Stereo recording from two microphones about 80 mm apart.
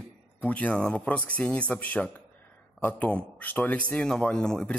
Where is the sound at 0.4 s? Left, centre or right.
Centre.